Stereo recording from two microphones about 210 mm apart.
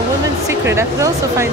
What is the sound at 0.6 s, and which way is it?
Speech, 15° right (ahead or behind).